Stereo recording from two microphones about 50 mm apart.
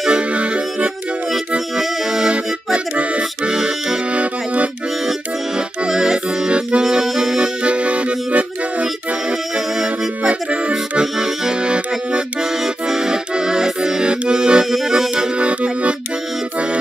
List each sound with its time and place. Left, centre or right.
0.1 s music: right
1.8 s accordion: centre
2.3 s accordion: right
4.1 s music: right
5.9 s music: centre
6.8 s accordion: centre
7.6 s music: right
10.2 s music: centre
11.6 s accordion: right
12.4 s music: centre
14.3 s accordion: centre
15.3 s accordion: right